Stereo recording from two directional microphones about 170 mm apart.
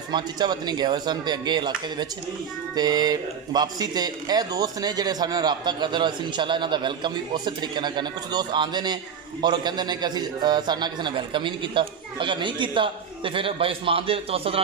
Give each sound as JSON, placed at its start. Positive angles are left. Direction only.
{"t": 0.1, "sound": "speech", "side_deg": -25}